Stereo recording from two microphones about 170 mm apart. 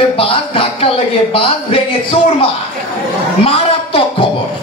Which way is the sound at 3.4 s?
30° left (ahead or behind).